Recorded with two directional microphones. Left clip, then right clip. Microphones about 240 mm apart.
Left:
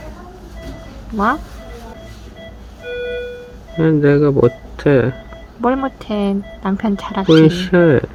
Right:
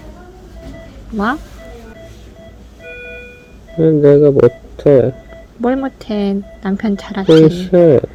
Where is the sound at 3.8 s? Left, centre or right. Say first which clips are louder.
Right 5 dB; centre.